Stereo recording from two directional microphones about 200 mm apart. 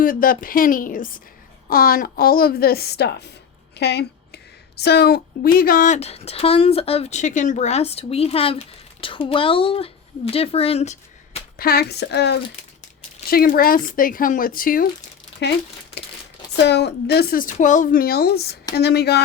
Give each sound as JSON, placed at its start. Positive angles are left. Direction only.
{"t": 0.0, "sound": "speech", "side_deg": 45}
{"t": 3.8, "sound": "a sound", "side_deg": 55}
{"t": 4.8, "sound": "a woman's voice", "side_deg": 55}
{"t": 11.5, "sound": "speech", "side_deg": 50}
{"t": 15.4, "sound": "speech", "side_deg": 60}
{"t": 16.6, "sound": "speech", "side_deg": 55}